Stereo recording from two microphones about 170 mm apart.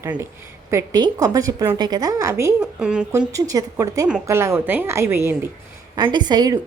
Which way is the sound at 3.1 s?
15° right (ahead or behind).